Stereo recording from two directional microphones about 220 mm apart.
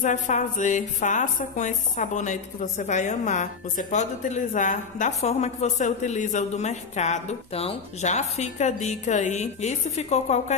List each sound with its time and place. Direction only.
0.0 s speech: 35° left (ahead or behind)